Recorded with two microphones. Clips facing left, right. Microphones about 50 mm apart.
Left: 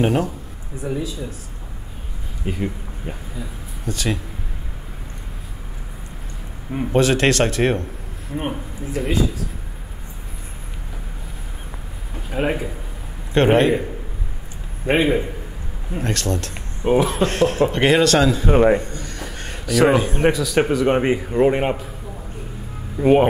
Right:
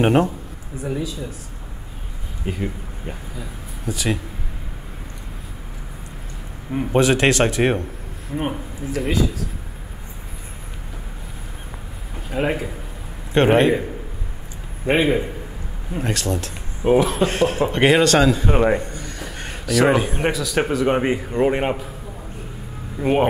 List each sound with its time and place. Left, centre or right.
0.0 s speech: right
0.8 s speech: centre
2.4 s speech: centre
6.7 s speech: centre
12.3 s speech: centre
14.9 s speech: centre
22.9 s speech: centre